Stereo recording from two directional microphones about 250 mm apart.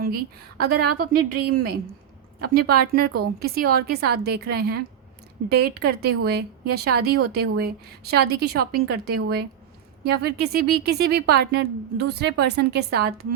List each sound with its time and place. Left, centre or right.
0.6 s a woman's voice: right